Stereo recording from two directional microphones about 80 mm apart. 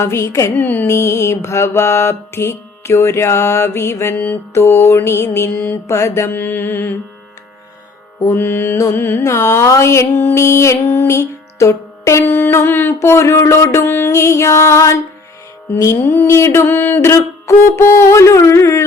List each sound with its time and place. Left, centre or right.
0.0 s mantra: left
0.5 s mantra: left
0.9 s mantra: left
6.3 s mantra: left
8.3 s mantra: left
10.3 s music: left
13.0 s mantra: left